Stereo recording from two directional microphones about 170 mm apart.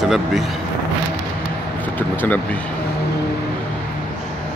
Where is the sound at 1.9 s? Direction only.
10° left (ahead or behind).